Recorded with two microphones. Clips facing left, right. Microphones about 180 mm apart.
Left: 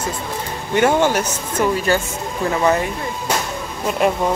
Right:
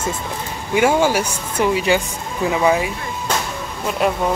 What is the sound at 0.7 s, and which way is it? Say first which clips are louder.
Speech: even; 10° right (ahead or behind).